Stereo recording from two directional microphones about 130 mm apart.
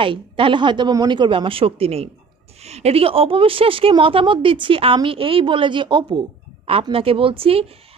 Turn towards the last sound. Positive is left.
turn(degrees=-50)  # may be behind; listen again after turning